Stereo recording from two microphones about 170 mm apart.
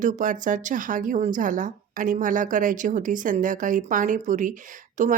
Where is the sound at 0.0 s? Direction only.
50° right (ahead or behind).